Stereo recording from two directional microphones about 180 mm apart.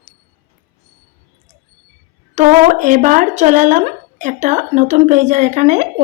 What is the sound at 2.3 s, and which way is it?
A woman's voice, 40° right (ahead or behind).